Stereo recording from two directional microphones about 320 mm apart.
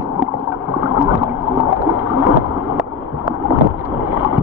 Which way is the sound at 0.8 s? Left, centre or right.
Centre.